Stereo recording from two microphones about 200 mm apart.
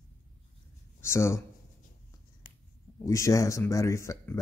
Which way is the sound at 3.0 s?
15° left (ahead or behind).